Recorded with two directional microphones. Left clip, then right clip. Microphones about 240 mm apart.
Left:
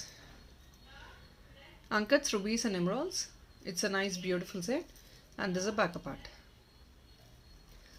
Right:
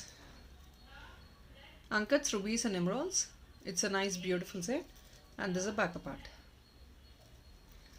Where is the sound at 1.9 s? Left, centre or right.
Centre.